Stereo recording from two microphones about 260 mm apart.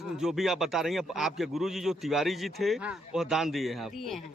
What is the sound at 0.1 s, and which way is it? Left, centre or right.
A man's voice, centre.